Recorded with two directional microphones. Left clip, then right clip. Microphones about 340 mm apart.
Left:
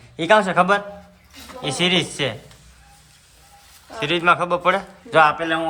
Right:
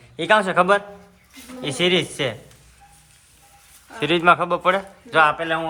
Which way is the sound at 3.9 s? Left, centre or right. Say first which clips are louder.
Right 1 dB; centre.